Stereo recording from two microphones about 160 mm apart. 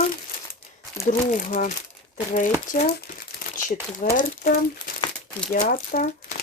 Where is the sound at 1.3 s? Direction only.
55° left (ahead or behind).